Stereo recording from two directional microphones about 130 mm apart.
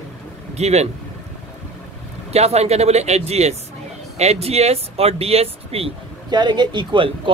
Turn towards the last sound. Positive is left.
turn(degrees=-40)  # may be behind; listen again after turning